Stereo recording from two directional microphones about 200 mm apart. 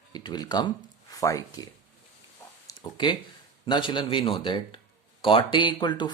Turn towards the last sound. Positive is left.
turn(degrees=25)  # may be behind; listen again after turning